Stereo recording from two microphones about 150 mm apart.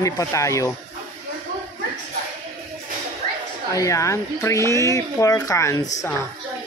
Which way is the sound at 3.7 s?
20° left (ahead or behind).